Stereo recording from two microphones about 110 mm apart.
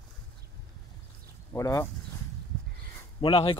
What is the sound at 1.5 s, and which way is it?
Speech, 25° left (ahead or behind).